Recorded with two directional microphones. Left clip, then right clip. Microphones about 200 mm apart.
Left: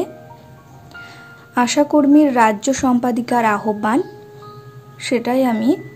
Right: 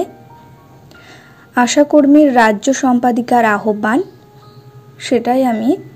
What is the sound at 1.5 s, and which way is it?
A woman's voice, 15° right (ahead or behind).